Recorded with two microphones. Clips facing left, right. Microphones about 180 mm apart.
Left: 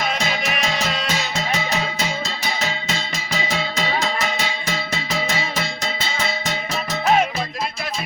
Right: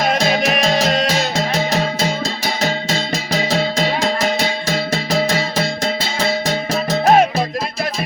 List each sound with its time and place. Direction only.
0.0 s music: 45° right (ahead or behind)
3.3 s music: 35° right (ahead or behind)